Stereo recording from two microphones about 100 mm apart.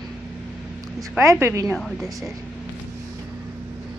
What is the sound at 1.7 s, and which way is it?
Speech, centre (ahead or behind).